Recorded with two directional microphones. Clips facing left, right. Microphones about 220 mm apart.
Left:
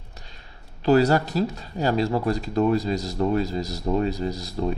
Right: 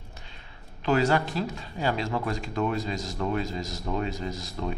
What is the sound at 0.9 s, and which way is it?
Speech, 35° left (ahead or behind).